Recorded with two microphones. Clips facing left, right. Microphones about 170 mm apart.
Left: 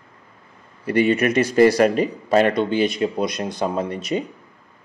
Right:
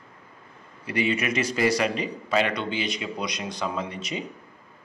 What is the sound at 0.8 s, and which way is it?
A man's voice, 55° left (ahead or behind).